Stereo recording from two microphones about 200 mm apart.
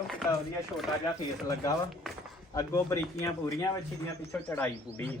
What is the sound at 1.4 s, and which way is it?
A man's voice, 15° left (ahead or behind).